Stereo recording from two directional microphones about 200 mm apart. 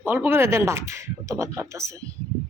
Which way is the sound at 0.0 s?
10° right (ahead or behind).